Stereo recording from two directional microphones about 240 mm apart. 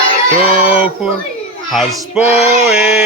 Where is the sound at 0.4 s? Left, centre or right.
Centre.